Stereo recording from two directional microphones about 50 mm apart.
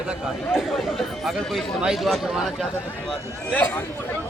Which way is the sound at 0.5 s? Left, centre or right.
Centre.